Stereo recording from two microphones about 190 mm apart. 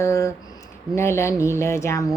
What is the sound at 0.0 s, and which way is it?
Speech, 15° left (ahead or behind).